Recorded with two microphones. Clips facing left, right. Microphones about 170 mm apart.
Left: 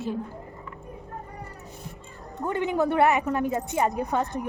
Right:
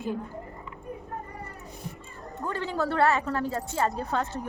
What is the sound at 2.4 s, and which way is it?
A woman's voice, 20° left (ahead or behind).